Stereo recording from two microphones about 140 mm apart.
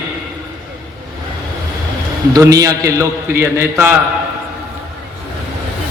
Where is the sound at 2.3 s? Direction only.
25° right (ahead or behind).